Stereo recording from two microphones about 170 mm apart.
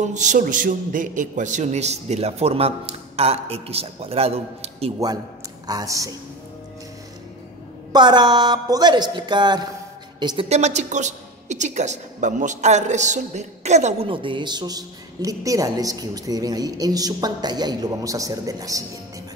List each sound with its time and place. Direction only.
0.0 s a man's voice: 45° right (ahead or behind)
5.7 s a woman's voice: 20° right (ahead or behind)
7.9 s a woman's voice: 25° right (ahead or behind)
10.5 s speech: 40° right (ahead or behind)
14.0 s a woman's voice: 30° right (ahead or behind)